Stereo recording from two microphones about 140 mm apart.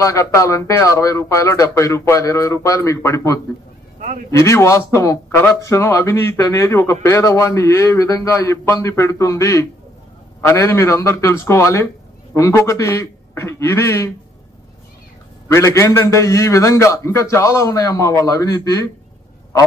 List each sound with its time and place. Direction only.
0.0 s speech: 20° left (ahead or behind)
15.4 s speech: 20° left (ahead or behind)